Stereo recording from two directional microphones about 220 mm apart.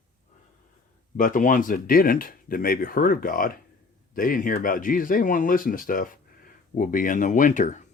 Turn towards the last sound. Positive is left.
turn(degrees=35)  # may be behind; listen again after turning